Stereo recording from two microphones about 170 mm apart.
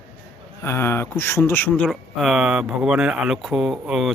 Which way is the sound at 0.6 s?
15° left (ahead or behind).